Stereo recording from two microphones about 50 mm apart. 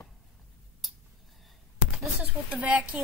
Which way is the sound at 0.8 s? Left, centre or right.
Centre.